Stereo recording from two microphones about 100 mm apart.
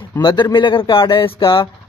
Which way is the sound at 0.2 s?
50° left (ahead or behind).